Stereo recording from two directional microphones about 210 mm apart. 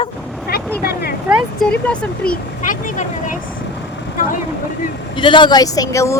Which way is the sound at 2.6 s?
40° left (ahead or behind).